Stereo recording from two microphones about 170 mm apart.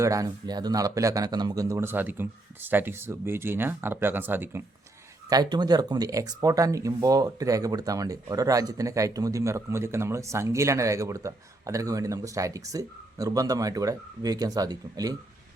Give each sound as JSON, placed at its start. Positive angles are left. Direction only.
{"t": 0.0, "sound": "speech", "side_deg": -20}
{"t": 5.3, "sound": "speech", "side_deg": -25}